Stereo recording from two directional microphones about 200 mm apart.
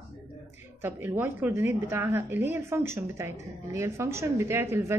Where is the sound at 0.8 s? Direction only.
10° right (ahead or behind).